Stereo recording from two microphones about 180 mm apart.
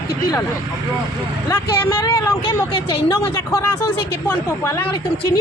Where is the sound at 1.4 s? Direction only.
15° left (ahead or behind).